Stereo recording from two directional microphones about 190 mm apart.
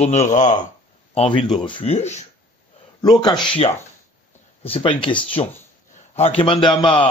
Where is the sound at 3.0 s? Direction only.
20° left (ahead or behind).